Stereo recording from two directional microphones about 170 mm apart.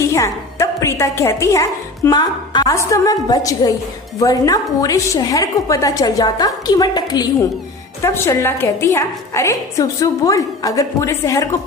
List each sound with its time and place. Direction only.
0.0 s a woman's voice: 20° left (ahead or behind)